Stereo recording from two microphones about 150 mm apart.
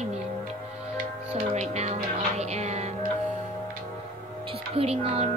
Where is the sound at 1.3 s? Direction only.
45° right (ahead or behind).